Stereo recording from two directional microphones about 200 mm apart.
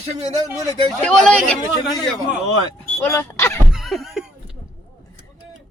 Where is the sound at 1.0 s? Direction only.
5° left (ahead or behind).